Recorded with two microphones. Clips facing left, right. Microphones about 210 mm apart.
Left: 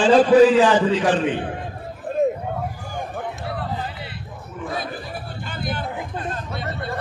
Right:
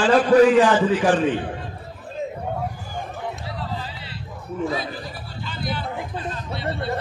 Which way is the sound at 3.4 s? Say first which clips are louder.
Left 3 dB; 55° left (ahead or behind).